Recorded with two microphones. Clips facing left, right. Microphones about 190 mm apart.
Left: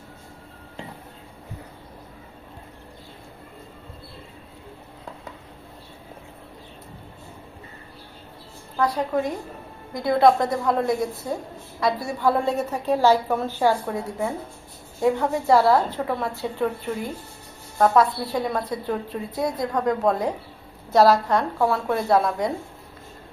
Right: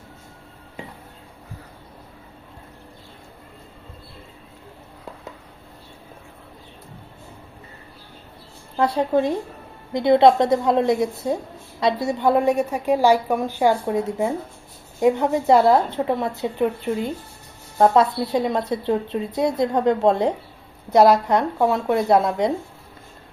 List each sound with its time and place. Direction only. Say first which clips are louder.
8.8 s a woman's voice: right 4 dB; 25° right (ahead or behind)